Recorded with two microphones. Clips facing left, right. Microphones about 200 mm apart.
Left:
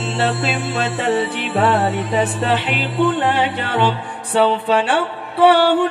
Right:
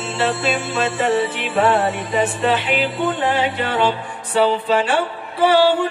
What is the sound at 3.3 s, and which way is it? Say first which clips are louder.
Music: even; 60° left (ahead or behind).